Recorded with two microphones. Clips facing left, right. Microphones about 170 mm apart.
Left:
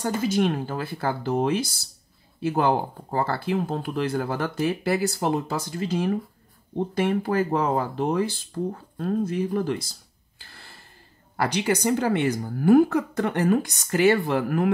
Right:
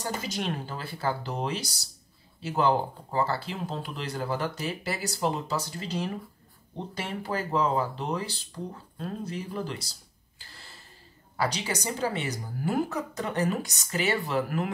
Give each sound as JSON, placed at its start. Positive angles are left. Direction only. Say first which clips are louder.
{"t": 0.0, "sound": "speech", "louder": "left 9 dB", "side_deg": 50}
{"t": 10.4, "sound": "gasp", "louder": "left 2 dB", "side_deg": 55}
{"t": 11.3, "sound": "speech", "louder": "left 6 dB", "side_deg": 55}